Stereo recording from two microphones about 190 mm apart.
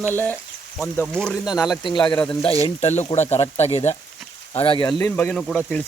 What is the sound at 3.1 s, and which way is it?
Speech, 35° left (ahead or behind).